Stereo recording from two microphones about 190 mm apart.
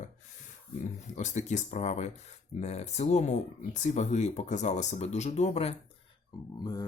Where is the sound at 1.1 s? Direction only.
40° left (ahead or behind).